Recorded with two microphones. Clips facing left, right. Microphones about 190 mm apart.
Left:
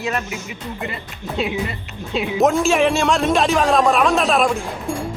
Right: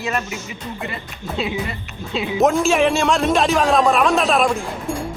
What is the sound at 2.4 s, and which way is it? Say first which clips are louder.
A man's voice: even; centre (ahead or behind).